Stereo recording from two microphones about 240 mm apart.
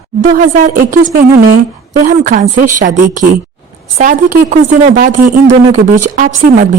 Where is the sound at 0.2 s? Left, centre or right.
Right.